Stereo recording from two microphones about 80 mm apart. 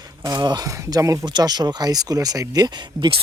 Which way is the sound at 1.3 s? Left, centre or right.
Right.